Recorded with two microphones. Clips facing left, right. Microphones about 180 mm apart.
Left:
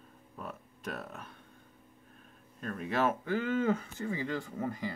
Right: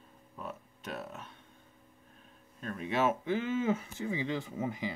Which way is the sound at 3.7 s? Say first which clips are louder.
Left 1 dB; 10° right (ahead or behind).